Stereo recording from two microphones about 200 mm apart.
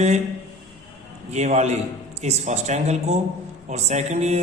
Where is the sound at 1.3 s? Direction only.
35° right (ahead or behind).